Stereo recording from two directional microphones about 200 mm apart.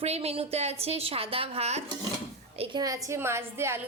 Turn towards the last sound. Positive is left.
turn(degrees=-10)  # may be behind; listen again after turning